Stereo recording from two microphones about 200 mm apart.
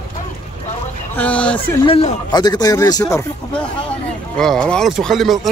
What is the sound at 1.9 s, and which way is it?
Speech, 30° left (ahead or behind).